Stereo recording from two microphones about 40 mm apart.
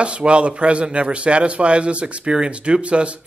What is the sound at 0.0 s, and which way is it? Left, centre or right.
Speech, right.